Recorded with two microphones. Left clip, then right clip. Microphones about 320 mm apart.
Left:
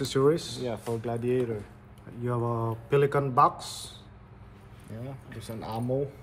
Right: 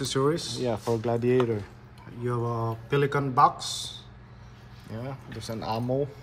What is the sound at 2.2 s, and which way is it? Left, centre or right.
Speech, centre.